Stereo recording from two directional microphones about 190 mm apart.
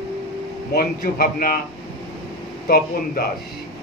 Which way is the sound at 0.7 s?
50° left (ahead or behind).